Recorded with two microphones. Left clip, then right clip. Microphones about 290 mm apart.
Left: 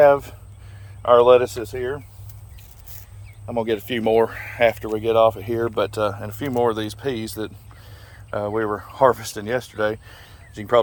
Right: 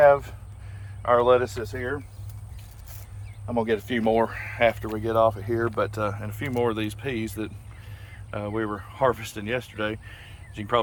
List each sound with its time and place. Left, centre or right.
0.0 s speech: left
3.4 s speech: left; by 10.8 s centre